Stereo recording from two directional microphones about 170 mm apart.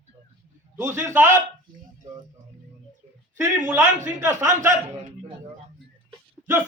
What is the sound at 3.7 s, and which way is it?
Speech, 15° right (ahead or behind).